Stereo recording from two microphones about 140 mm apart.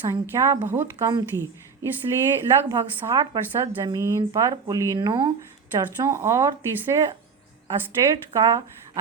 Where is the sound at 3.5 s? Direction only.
20° right (ahead or behind).